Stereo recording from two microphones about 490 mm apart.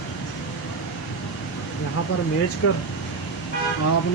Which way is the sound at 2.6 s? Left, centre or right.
Left.